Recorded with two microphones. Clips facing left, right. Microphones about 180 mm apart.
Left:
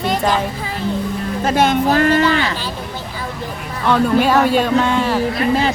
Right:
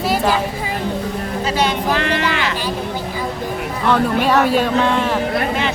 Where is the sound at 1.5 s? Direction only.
50° left (ahead or behind).